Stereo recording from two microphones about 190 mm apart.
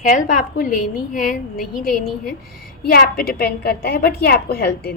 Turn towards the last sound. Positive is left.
turn(degrees=55)  # may be behind; listen again after turning